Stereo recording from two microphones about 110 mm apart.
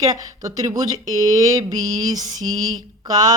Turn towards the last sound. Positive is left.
turn(degrees=-35)  # may be behind; listen again after turning